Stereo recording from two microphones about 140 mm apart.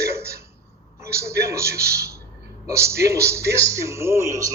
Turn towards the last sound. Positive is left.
turn(degrees=-20)  # may be behind; listen again after turning